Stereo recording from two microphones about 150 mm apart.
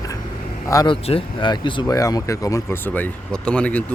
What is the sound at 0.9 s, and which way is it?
Speech, 40° left (ahead or behind).